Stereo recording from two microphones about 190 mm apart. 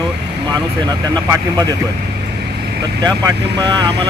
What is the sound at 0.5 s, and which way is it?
Speech, 20° right (ahead or behind).